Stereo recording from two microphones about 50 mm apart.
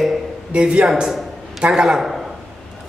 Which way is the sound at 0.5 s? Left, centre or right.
Right.